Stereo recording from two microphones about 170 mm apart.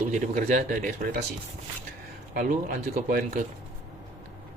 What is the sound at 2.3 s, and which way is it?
A man's voice, 55° right (ahead or behind).